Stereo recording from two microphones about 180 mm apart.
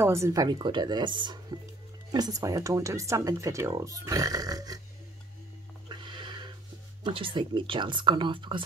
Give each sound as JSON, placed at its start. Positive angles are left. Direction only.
{"t": 0.0, "sound": "speech", "side_deg": -15}
{"t": 5.9, "sound": "a sound", "side_deg": -25}
{"t": 7.0, "sound": "speech", "side_deg": -30}